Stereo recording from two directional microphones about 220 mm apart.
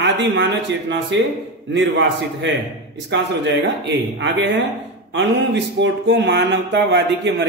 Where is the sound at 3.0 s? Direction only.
50° right (ahead or behind).